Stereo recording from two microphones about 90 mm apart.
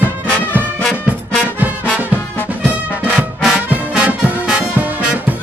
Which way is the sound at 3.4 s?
5° right (ahead or behind).